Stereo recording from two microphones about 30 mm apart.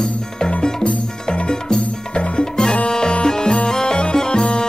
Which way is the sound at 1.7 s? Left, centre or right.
Left.